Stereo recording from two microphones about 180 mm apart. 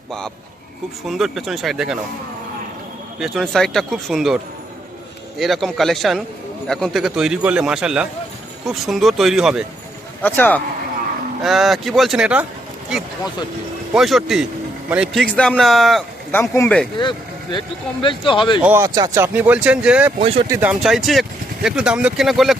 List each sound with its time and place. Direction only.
1.0 s speech: centre (ahead or behind)
3.2 s speech: centre (ahead or behind)
5.4 s speech: centre (ahead or behind)
10.2 s speech: 10° left (ahead or behind)
11.4 s speech: centre (ahead or behind)
13.9 s speech: centre (ahead or behind)
17.0 s speech: 25° left (ahead or behind)
18.6 s speech: 10° right (ahead or behind)